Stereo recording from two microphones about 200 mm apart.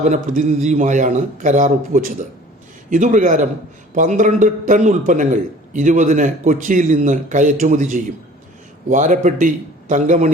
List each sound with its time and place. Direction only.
0.0 s a man's voice: 35° right (ahead or behind)